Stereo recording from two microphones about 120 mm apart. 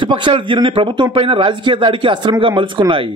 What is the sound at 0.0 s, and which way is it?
A man's voice, 45° right (ahead or behind).